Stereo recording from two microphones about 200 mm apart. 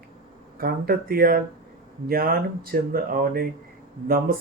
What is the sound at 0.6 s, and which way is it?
Speech, 50° right (ahead or behind).